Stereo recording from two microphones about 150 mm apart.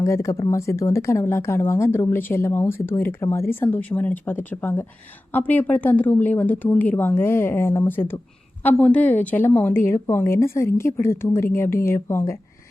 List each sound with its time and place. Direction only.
0.0 s speech: 20° left (ahead or behind)